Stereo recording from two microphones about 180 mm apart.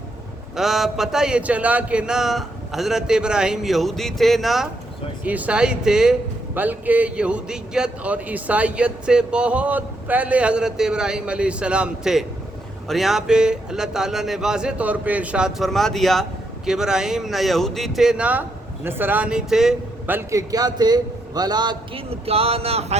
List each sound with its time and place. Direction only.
0.5 s a man's voice: centre (ahead or behind); by 23.0 s 35° right (ahead or behind)